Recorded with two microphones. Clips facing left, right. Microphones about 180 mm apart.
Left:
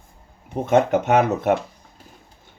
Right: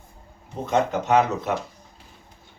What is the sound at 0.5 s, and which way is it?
Speech, 55° left (ahead or behind).